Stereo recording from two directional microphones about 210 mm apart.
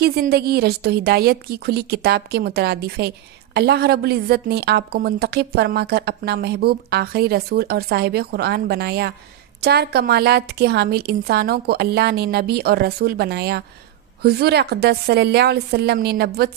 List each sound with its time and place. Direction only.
0.0 s a woman's voice: 50° right (ahead or behind)